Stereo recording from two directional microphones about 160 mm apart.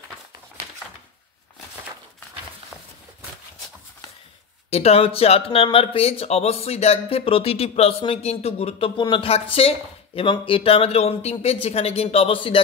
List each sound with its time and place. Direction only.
4.6 s speech: 40° left (ahead or behind)